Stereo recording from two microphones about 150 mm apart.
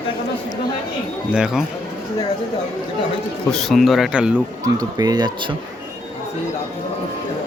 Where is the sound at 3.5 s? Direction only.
Centre (ahead or behind).